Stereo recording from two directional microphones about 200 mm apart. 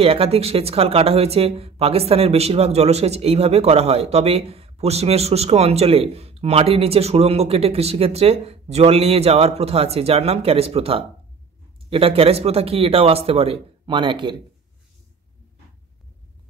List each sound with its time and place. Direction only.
0.0 s speech: 30° right (ahead or behind)